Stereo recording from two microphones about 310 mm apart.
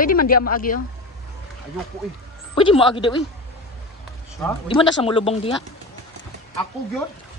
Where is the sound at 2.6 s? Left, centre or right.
Centre.